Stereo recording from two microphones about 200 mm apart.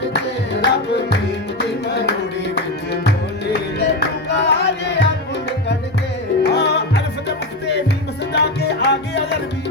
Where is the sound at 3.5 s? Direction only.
60° left (ahead or behind).